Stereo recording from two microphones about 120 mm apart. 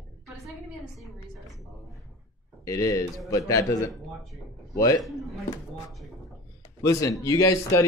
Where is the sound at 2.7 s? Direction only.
30° left (ahead or behind).